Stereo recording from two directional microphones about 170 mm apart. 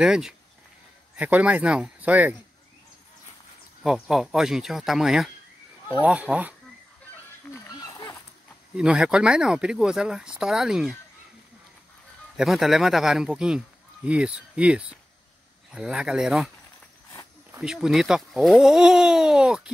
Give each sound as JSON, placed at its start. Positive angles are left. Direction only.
{"t": 0.0, "sound": "speech", "side_deg": -5}
{"t": 3.8, "sound": "speech", "side_deg": 0}
{"t": 7.8, "sound": "a sound", "side_deg": 20}
{"t": 8.7, "sound": "speech", "side_deg": -5}
{"t": 12.4, "sound": "speech", "side_deg": 0}
{"t": 17.6, "sound": "speech", "side_deg": 0}